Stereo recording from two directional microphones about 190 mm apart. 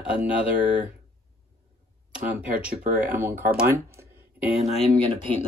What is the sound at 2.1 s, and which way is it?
Speech, 5° right (ahead or behind).